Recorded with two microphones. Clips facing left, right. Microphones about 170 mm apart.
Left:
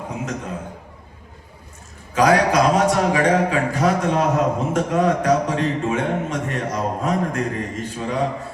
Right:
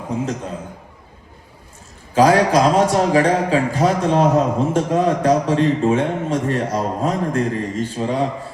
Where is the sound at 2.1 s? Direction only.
30° right (ahead or behind).